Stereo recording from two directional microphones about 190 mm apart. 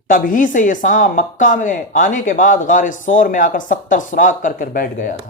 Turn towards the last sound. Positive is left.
turn(degrees=45)  # may be behind; listen again after turning